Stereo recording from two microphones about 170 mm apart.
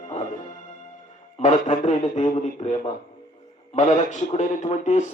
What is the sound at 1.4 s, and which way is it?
Music, 45° left (ahead or behind).